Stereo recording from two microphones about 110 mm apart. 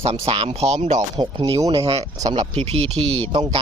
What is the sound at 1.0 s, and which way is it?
Speech, 40° right (ahead or behind).